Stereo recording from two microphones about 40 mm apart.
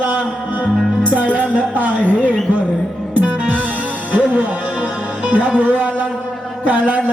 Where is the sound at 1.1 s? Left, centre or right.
Right.